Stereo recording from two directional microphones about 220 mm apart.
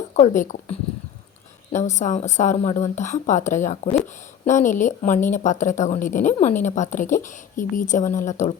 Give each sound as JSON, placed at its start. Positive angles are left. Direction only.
{"t": 0.2, "sound": "a woman's voice", "side_deg": 35}